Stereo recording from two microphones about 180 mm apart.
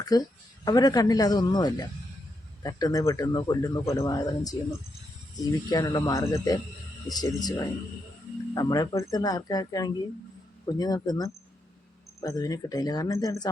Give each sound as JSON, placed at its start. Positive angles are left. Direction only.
{"t": 0.0, "sound": "speech", "side_deg": 20}
{"t": 5.6, "sound": "speech", "side_deg": 20}